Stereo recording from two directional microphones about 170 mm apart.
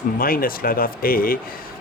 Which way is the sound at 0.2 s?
60° left (ahead or behind).